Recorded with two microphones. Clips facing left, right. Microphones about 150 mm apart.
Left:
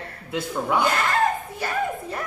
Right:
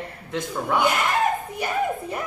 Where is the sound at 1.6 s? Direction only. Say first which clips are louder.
Right 2 dB; 15° right (ahead or behind).